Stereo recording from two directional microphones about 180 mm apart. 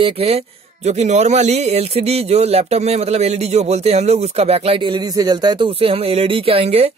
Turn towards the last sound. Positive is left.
turn(degrees=-30)  # may be behind; listen again after turning